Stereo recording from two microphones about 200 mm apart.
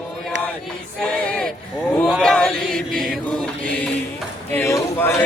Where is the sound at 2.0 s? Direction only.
Centre (ahead or behind).